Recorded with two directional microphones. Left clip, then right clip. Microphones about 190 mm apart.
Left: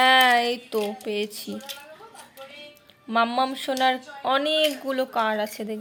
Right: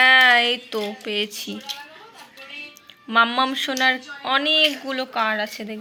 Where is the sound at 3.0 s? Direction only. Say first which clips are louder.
Right 4 dB; 10° left (ahead or behind).